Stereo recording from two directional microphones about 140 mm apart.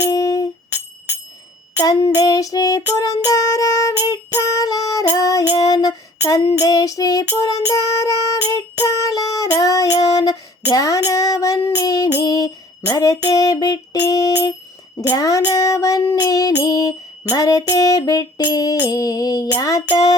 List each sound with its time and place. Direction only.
0.1 s music: 25° left (ahead or behind)
1.8 s music: 25° left (ahead or behind)
4.1 s child singing: 25° left (ahead or behind)
12.9 s music: 25° left (ahead or behind)